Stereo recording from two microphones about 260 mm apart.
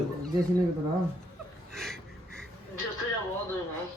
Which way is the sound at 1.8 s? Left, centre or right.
Centre.